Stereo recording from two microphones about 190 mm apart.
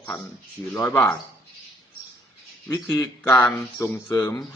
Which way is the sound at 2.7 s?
15° left (ahead or behind).